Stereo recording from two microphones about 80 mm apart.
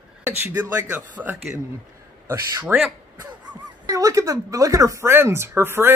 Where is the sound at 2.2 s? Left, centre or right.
Right.